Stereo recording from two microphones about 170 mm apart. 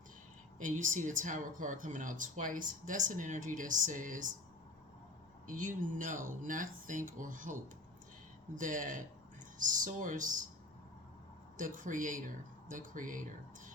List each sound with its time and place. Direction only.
0.6 s speech: 50° right (ahead or behind)
5.5 s speech: 50° right (ahead or behind)
11.5 s speech: 50° right (ahead or behind)